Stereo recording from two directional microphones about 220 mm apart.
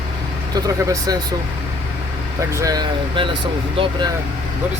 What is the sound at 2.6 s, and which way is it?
Speech, 15° right (ahead or behind).